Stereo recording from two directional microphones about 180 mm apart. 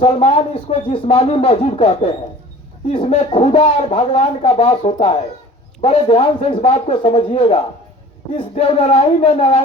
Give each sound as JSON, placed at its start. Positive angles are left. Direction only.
{"t": 0.0, "sound": "speech", "side_deg": 35}
{"t": 3.1, "sound": "speech", "side_deg": 35}